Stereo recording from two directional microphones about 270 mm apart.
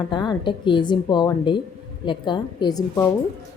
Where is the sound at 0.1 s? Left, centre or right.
Centre.